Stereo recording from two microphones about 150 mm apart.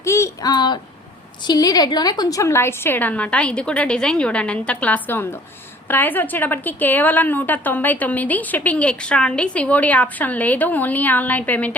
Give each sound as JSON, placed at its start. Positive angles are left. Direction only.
{"t": 0.0, "sound": "a woman's voice", "side_deg": 20}